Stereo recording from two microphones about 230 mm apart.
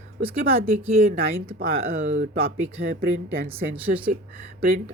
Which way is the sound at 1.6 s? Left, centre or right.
Right.